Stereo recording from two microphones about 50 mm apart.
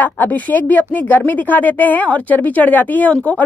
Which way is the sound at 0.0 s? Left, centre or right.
Left.